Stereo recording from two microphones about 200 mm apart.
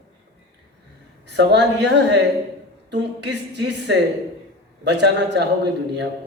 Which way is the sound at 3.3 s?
60° right (ahead or behind).